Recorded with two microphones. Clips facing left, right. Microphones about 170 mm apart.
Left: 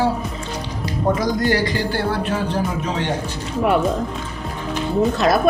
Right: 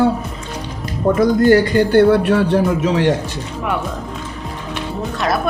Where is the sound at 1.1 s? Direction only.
50° right (ahead or behind); by 3.1 s 70° right (ahead or behind).